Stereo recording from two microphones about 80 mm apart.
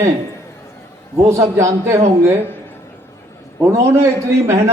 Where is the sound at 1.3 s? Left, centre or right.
Right.